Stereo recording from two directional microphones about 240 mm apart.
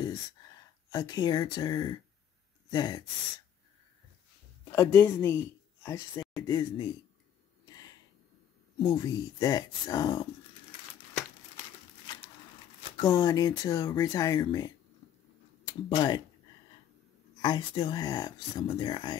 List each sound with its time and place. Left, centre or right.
0.8 s speech: centre
4.7 s speech: centre
7.6 s a sound: centre
8.7 s speech: centre
12.9 s speech: centre
15.9 s speech: centre
17.4 s speech: centre